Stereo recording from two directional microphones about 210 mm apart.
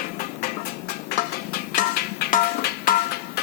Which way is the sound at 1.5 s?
45° left (ahead or behind).